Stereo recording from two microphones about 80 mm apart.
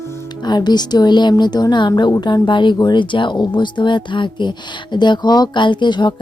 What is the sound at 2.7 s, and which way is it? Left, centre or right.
Speech, left.